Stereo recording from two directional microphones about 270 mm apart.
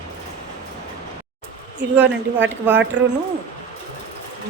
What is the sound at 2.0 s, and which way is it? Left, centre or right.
A woman's voice, right.